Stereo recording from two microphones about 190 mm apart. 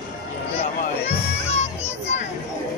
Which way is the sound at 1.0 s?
35° left (ahead or behind).